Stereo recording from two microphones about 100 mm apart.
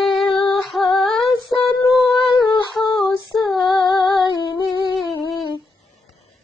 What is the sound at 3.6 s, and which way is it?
Female singing, 55° left (ahead or behind).